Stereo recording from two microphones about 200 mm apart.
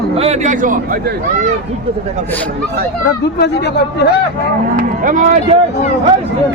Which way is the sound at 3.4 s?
55° left (ahead or behind).